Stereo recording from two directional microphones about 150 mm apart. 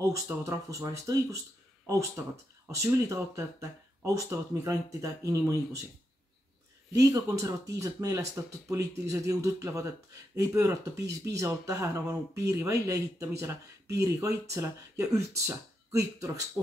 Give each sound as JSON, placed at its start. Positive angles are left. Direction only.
{"t": 0.1, "sound": "speech", "side_deg": -20}
{"t": 2.7, "sound": "speech", "side_deg": -20}
{"t": 6.9, "sound": "speech", "side_deg": -20}